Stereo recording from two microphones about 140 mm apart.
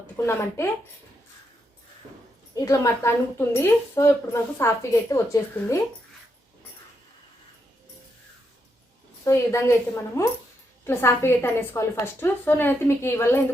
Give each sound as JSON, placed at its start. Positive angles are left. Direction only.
{"t": 0.3, "sound": "a woman's voice", "side_deg": 20}
{"t": 2.6, "sound": "a woman's voice", "side_deg": 25}
{"t": 9.2, "sound": "a woman's voice", "side_deg": 20}